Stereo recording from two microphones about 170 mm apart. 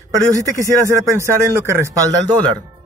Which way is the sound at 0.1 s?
20° right (ahead or behind).